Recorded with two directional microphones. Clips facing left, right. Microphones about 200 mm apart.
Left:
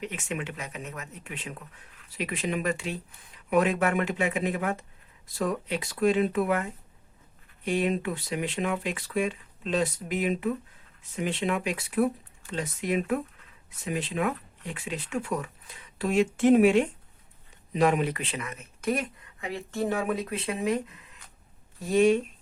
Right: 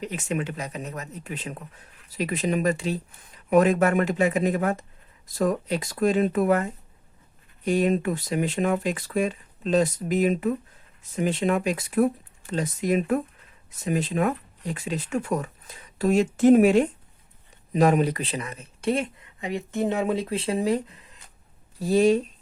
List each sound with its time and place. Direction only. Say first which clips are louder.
0.0 s speech: right 5 dB; 35° right (ahead or behind)